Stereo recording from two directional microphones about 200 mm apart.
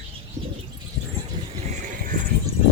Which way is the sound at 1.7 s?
40° right (ahead or behind).